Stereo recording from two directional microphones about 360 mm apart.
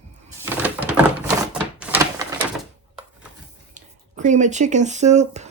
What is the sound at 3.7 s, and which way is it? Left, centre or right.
Speech, centre.